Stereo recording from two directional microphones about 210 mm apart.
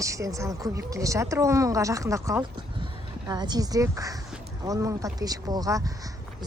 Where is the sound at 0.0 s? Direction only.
15° right (ahead or behind).